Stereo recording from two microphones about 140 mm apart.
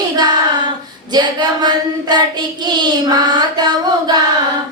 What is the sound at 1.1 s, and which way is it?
Child singing, 30° right (ahead or behind).